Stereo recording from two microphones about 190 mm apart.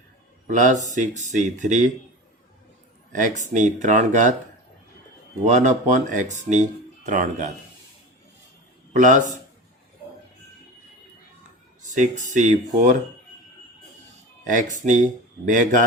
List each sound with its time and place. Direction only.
0.4 s speech: 40° right (ahead or behind)
3.1 s speech: 45° right (ahead or behind)
5.5 s speech: 40° right (ahead or behind)
9.0 s speech: 45° right (ahead or behind)
11.8 s a sound: 40° right (ahead or behind)
12.3 s speech: 40° right (ahead or behind)
14.4 s speech: 40° right (ahead or behind)